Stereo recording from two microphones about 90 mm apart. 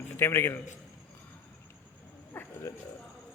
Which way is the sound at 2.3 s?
25° left (ahead or behind).